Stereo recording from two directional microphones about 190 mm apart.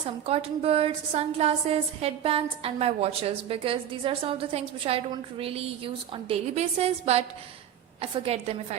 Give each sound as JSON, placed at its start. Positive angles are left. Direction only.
{"t": 0.0, "sound": "a woman's voice", "side_deg": -30}